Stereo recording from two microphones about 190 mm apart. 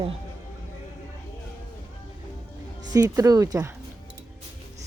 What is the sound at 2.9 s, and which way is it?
Speech, 20° right (ahead or behind).